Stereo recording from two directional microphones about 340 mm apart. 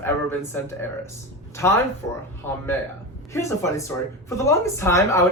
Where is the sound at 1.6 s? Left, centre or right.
Centre.